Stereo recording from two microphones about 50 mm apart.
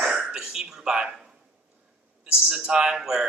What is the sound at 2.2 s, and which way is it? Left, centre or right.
A man's voice, centre.